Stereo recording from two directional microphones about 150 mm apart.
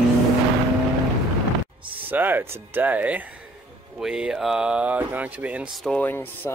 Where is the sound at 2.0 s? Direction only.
15° right (ahead or behind).